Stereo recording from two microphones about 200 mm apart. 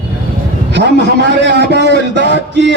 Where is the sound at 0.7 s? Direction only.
60° right (ahead or behind).